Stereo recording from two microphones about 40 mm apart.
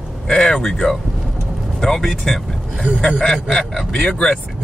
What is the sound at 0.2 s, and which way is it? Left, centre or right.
Speech, centre.